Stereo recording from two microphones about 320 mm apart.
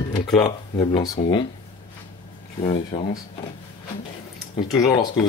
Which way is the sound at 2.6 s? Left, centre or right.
Centre.